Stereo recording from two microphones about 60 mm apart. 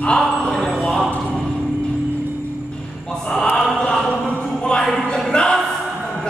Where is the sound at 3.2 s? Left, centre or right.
Centre.